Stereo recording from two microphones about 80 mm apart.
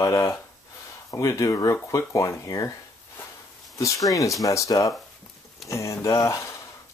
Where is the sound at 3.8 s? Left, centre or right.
Left.